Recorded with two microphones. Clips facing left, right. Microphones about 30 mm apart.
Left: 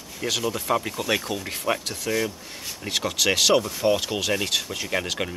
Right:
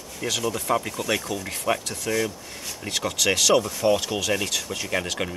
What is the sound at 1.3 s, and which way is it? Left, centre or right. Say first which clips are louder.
Speech: even; left.